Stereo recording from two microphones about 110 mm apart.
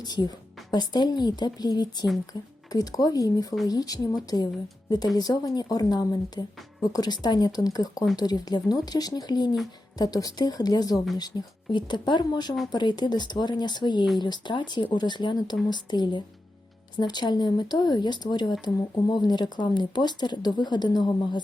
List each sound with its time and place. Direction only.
0.0 s speech: 40° left (ahead or behind)